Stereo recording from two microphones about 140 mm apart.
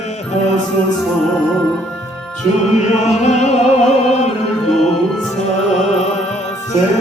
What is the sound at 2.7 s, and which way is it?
Music, 55° left (ahead or behind).